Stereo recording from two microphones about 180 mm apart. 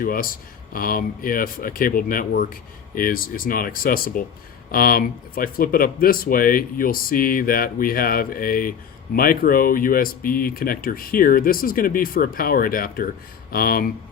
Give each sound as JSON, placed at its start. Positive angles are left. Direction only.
{"t": 0.0, "sound": "speech", "side_deg": 50}